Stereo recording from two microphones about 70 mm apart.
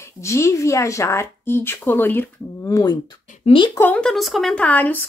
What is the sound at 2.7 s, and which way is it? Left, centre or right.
Speech, left.